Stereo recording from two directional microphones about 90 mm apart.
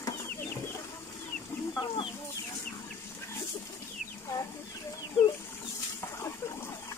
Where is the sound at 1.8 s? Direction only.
65° left (ahead or behind).